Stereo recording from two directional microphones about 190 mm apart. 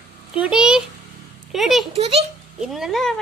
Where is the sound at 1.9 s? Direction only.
30° right (ahead or behind).